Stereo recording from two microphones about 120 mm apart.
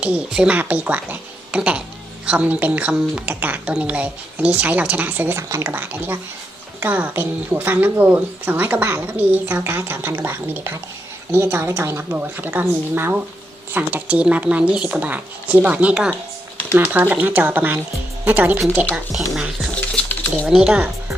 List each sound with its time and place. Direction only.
0.0 s a woman's voice: 10° right (ahead or behind)
18.9 s a woman's voice: centre (ahead or behind)